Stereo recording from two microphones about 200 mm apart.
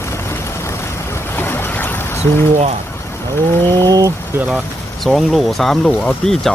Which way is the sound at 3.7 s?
20° right (ahead or behind).